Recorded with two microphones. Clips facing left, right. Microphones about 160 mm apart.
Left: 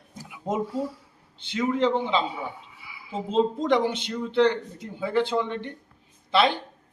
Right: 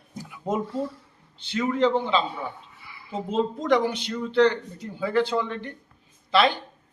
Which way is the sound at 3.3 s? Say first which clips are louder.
Left 1 dB; 25° left (ahead or behind).